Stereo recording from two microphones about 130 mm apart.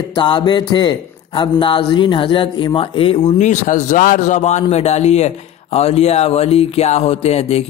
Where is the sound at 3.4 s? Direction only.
70° left (ahead or behind); by 7.6 s 55° left (ahead or behind).